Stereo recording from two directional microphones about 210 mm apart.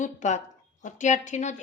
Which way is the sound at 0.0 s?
35° left (ahead or behind).